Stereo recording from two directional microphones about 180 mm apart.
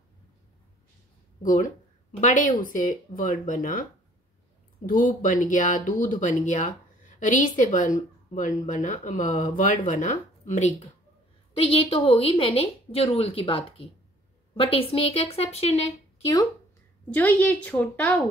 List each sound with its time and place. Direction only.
1.4 s speech: 45° left (ahead or behind)
4.8 s a woman's voice: 50° left (ahead or behind)
17.1 s a woman's voice: 10° left (ahead or behind)